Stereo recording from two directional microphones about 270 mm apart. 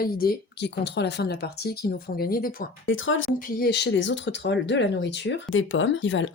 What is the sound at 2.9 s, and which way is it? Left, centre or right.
Speech, left.